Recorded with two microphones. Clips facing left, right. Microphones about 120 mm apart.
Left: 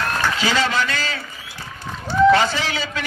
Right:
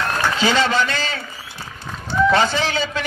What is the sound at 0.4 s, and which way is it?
Speech, 25° right (ahead or behind).